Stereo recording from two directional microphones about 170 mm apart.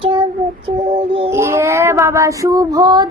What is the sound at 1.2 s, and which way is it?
A woman's voice, 15° right (ahead or behind).